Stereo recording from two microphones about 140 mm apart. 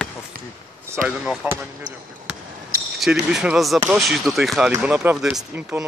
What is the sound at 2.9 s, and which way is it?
Speech, 5° right (ahead or behind).